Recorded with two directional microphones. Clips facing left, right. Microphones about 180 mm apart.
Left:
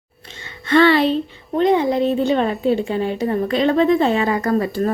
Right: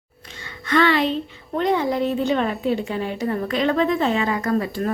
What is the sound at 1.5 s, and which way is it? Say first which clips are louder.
A woman's voice: left 4 dB; 20° left (ahead or behind).